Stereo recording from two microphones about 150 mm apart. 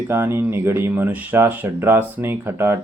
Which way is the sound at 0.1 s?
15° right (ahead or behind).